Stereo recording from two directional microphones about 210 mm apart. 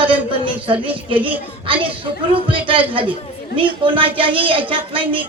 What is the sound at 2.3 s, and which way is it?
Speech, 25° right (ahead or behind).